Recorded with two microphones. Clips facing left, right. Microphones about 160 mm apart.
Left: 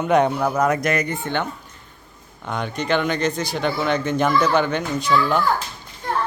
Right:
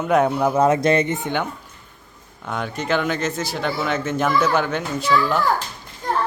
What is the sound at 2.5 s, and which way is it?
Speech, 5° right (ahead or behind).